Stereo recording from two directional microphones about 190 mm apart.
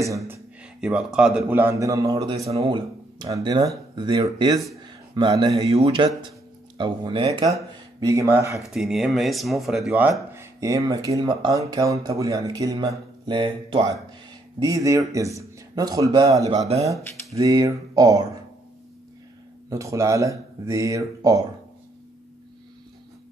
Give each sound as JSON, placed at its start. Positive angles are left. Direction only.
{"t": 0.3, "sound": "a man's voice", "side_deg": -5}
{"t": 2.4, "sound": "speech", "side_deg": -30}
{"t": 8.6, "sound": "speech", "side_deg": 0}
{"t": 19.7, "sound": "speech", "side_deg": -15}